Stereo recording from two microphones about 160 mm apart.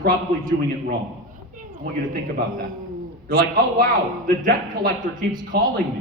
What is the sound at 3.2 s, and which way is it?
A man's voice, 65° right (ahead or behind).